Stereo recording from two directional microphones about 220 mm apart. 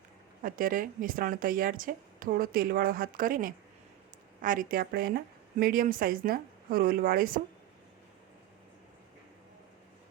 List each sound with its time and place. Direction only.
0.4 s a woman's voice: 40° right (ahead or behind)